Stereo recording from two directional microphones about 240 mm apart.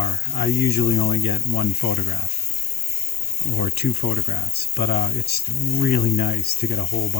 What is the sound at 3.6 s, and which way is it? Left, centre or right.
Speech, left.